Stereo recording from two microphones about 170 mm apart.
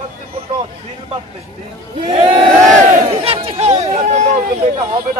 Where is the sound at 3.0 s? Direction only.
35° right (ahead or behind).